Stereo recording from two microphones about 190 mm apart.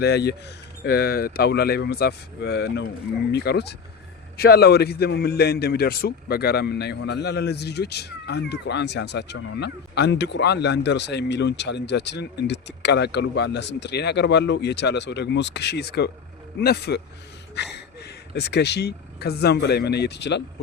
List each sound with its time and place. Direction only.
0.0 s a man's voice: 60° left (ahead or behind)